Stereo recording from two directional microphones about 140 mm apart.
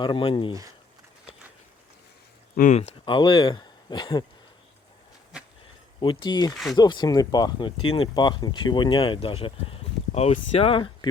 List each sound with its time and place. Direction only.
0.0 s speech: 35° left (ahead or behind)
2.6 s speech: 90° left
3.1 s speech: 35° left (ahead or behind)
6.0 s speech: 35° left (ahead or behind)
6.5 s speech: centre (ahead or behind)
6.7 s speech: 30° left (ahead or behind)